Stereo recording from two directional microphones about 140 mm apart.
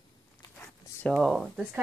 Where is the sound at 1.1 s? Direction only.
Centre (ahead or behind).